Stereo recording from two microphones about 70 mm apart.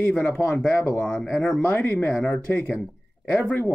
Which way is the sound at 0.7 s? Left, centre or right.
Centre.